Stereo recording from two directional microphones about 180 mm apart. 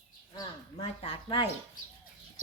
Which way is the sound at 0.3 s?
30° left (ahead or behind).